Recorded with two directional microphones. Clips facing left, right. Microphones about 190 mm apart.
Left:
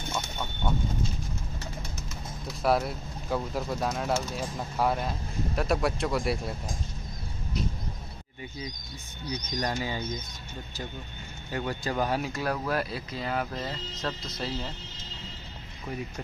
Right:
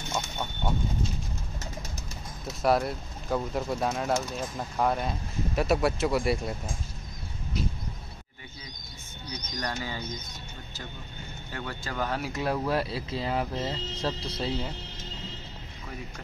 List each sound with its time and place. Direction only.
2.6 s speech: centre (ahead or behind)
9.6 s bird: 20° left (ahead or behind)
11.5 s speech: 20° left (ahead or behind)
12.3 s speech: 20° right (ahead or behind)